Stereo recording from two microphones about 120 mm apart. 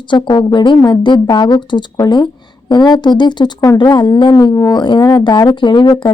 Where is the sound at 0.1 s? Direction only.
40° left (ahead or behind).